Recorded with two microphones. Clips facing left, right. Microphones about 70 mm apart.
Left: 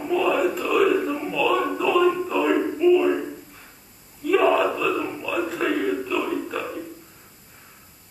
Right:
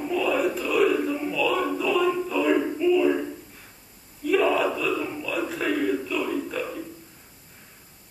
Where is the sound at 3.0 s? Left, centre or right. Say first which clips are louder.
Left 1 dB; centre.